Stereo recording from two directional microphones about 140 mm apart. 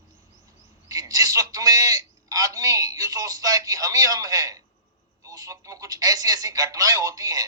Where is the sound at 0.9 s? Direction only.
25° right (ahead or behind).